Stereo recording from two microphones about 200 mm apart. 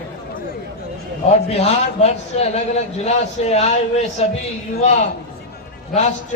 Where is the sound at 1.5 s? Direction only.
30° left (ahead or behind).